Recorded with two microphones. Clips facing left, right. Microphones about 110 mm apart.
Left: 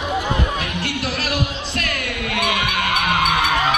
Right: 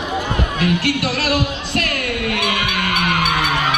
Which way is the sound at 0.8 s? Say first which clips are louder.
Right 5 dB; 50° right (ahead or behind).